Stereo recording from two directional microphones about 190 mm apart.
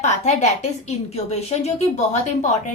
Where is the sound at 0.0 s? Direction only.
35° left (ahead or behind).